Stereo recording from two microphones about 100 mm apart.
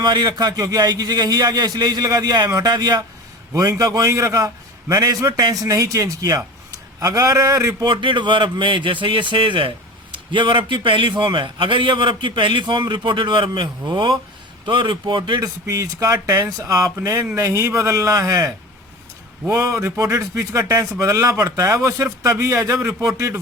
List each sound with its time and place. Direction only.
0.0 s a man's voice: 45° right (ahead or behind)
7.9 s a man's voice: 50° right (ahead or behind)
15.4 s a man's voice: 35° right (ahead or behind)
19.5 s a man's voice: 30° right (ahead or behind)